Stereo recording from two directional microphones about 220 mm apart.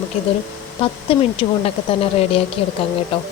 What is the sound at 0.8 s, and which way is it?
A woman's voice, 25° left (ahead or behind).